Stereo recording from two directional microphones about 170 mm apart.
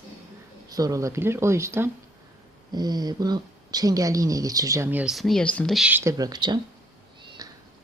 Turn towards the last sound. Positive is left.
turn(degrees=-20)  # may be behind; listen again after turning